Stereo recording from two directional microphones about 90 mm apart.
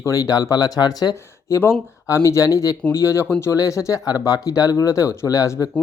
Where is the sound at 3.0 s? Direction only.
30° left (ahead or behind).